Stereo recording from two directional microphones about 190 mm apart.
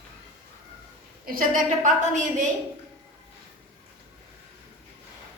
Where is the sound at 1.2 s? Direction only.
50° right (ahead or behind).